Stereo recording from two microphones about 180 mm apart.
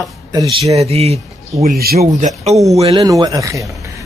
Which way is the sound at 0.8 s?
35° right (ahead or behind).